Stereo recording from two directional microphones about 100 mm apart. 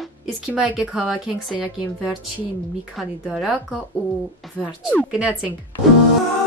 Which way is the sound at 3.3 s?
5° right (ahead or behind).